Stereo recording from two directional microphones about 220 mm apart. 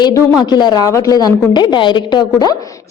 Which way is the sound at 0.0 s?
20° left (ahead or behind).